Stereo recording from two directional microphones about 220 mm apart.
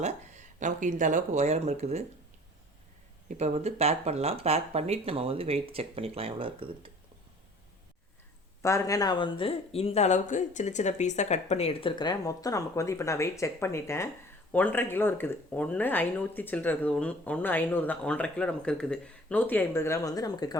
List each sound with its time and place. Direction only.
0.0 s speech: 35° right (ahead or behind)
3.2 s speech: 30° right (ahead or behind)
8.6 s speech: 15° left (ahead or behind)